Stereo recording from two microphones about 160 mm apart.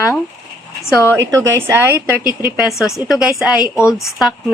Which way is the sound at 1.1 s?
20° right (ahead or behind).